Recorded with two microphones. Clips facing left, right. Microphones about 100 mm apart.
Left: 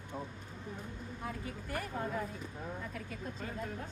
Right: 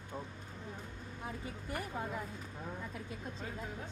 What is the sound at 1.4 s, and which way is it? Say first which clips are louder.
A woman's voice: left 1 dB; 20° right (ahead or behind).